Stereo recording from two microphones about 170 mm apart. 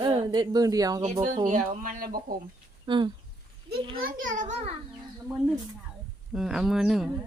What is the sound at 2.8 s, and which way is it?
Speech, 25° right (ahead or behind).